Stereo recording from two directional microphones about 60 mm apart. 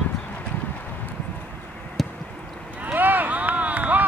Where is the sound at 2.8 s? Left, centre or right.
Right.